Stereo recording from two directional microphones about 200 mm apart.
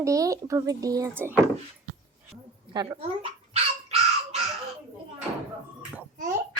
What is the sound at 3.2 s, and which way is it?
Dog, 30° right (ahead or behind).